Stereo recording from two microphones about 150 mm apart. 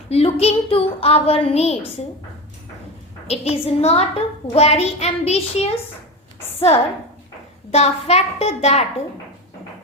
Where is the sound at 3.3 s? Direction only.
40° left (ahead or behind).